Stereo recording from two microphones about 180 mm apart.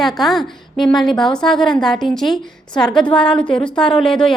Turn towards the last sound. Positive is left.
turn(degrees=5)  # may be behind; listen again after turning